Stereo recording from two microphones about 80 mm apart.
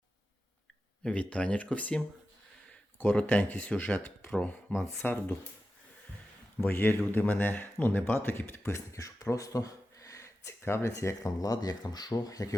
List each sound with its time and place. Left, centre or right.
1.0 s speech: centre
3.0 s speech: centre
6.6 s speech: left